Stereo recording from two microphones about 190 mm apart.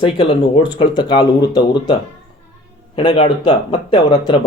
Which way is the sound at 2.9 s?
25° left (ahead or behind).